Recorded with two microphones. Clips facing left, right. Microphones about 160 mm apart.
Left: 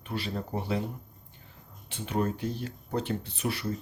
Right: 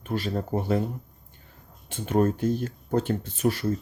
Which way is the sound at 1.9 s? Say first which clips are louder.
Right 7 dB; 45° right (ahead or behind).